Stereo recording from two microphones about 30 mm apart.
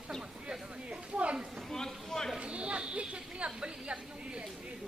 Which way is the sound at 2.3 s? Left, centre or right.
Right.